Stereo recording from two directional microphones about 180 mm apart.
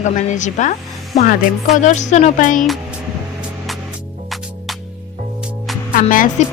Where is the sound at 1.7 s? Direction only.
40° left (ahead or behind).